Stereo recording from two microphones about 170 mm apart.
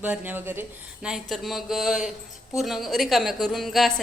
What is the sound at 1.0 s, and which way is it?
A woman's voice, centre (ahead or behind).